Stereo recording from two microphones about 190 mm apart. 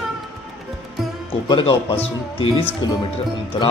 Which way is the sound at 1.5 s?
25° left (ahead or behind).